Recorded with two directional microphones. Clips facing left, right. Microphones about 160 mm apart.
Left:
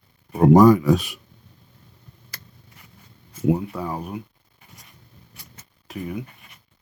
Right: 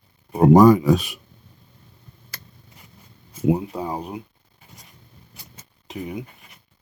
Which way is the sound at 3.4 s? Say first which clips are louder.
Right 1 dB; 20° right (ahead or behind).